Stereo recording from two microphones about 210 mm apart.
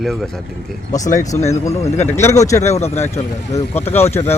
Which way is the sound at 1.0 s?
35° left (ahead or behind).